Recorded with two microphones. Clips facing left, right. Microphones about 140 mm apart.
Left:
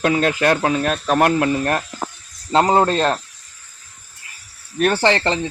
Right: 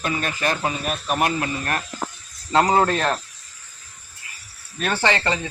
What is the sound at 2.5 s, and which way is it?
Speech, 30° left (ahead or behind).